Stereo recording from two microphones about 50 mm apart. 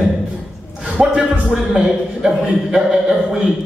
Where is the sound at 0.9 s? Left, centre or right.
Centre.